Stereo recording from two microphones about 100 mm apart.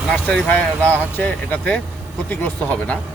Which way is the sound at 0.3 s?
10° left (ahead or behind).